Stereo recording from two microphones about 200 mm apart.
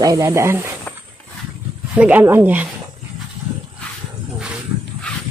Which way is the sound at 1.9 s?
5° right (ahead or behind).